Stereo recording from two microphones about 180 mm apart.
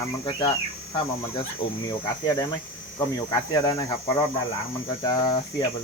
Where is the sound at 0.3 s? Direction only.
25° left (ahead or behind).